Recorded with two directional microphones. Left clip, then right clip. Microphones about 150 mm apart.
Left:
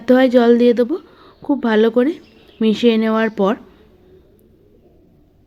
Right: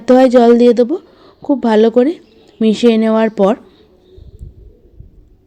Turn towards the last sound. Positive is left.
turn(degrees=-30)  # may be behind; listen again after turning